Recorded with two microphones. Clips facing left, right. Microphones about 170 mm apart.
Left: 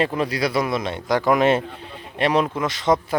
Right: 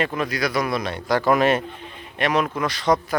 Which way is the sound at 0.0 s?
30° left (ahead or behind).